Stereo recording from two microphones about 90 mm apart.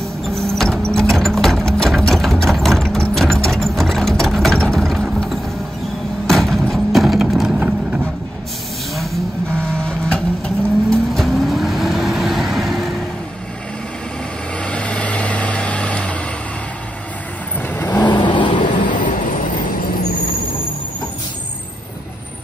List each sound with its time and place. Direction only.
0.4 s vehicle: 5° left (ahead or behind)
0.9 s sewing machine: 5° left (ahead or behind)
6.2 s a sound: centre (ahead or behind)
7.6 s vehicle: 20° right (ahead or behind)
8.9 s vehicle: centre (ahead or behind)
9.7 s vehicle: 10° left (ahead or behind)
14.6 s vehicle: 10° left (ahead or behind)
17.6 s vehicle: 20° left (ahead or behind)
18.0 s vehicle: 60° left (ahead or behind)